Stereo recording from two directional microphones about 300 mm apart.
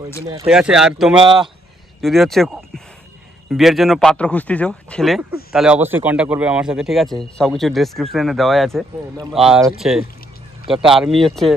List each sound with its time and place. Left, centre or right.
0.5 s speech: centre
1.2 s speech: centre
2.0 s speech: centre